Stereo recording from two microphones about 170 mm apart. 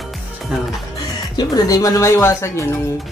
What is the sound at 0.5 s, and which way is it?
Speech, 5° right (ahead or behind).